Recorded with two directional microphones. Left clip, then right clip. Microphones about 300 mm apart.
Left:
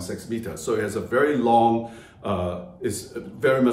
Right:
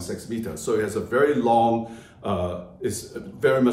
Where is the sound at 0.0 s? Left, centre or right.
Centre.